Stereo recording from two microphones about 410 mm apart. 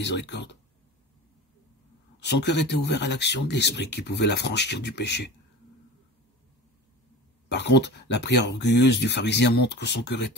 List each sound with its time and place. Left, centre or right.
0.0 s speech: left
2.1 s speech: left
7.4 s speech: left